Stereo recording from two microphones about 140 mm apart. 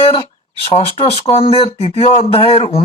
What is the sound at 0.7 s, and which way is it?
Speech, 40° left (ahead or behind).